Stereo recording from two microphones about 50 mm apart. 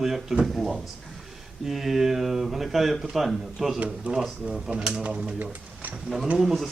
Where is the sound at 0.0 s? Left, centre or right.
Centre.